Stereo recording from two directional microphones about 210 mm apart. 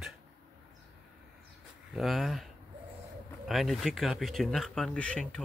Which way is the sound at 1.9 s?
Centre (ahead or behind).